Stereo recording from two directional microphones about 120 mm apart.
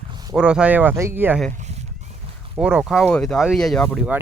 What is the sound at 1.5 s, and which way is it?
Zipper, 75° right (ahead or behind).